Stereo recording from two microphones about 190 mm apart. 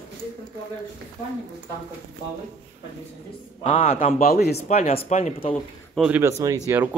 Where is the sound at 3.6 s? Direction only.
35° left (ahead or behind).